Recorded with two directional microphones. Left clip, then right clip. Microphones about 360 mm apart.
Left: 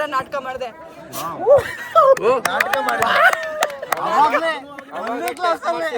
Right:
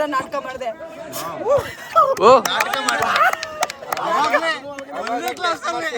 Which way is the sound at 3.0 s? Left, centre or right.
Left.